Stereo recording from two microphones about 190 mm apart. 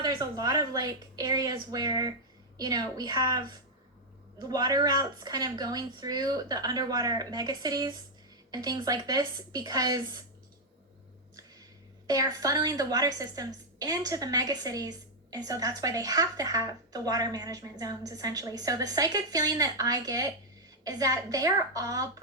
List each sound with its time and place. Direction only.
0.0 s a woman's voice: 20° right (ahead or behind)
12.0 s a woman's voice: 20° right (ahead or behind)